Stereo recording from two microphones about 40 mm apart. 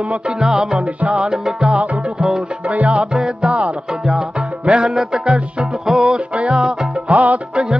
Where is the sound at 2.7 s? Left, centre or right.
Right; by 6.1 s centre.